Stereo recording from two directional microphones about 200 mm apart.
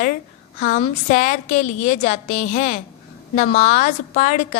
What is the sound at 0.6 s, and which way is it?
A woman's voice, 40° left (ahead or behind).